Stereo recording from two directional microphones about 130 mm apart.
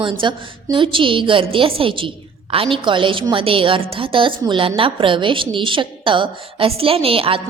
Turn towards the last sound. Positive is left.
turn(degrees=-45)  # may be behind; listen again after turning